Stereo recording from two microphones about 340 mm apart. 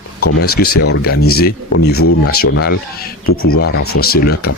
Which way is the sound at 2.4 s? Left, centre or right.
Left.